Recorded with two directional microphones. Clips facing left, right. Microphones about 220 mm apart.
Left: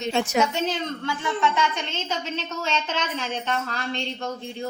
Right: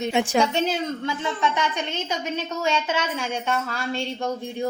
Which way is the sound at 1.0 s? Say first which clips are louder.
Even; 20° right (ahead or behind).